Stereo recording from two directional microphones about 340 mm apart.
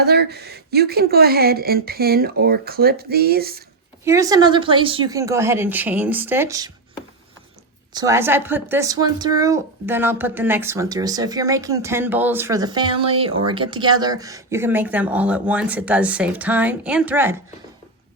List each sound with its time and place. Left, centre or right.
0.0 s speech: right
4.0 s speech: centre
7.9 s speech: centre